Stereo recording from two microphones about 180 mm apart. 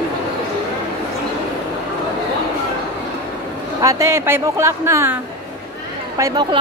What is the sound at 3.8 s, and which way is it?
A woman's voice, 15° right (ahead or behind).